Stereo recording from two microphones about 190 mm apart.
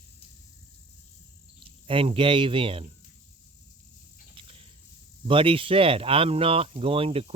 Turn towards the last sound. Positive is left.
turn(degrees=-30)  # may be behind; listen again after turning